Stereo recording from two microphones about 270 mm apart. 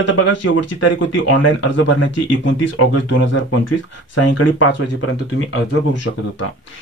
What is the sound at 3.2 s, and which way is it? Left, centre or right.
Speech, left.